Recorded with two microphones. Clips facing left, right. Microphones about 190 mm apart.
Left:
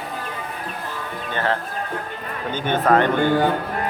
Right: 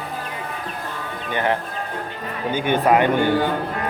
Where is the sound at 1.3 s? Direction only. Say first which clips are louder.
Right 2 dB; 15° right (ahead or behind).